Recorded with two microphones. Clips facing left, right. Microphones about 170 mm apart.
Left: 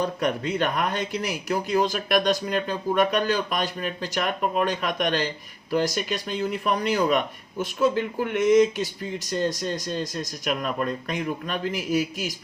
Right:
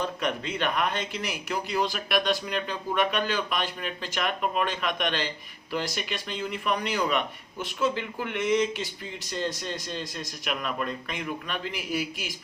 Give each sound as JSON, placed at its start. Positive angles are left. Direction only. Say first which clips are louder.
{"t": 0.0, "sound": "speech", "louder": "left 4 dB", "side_deg": 40}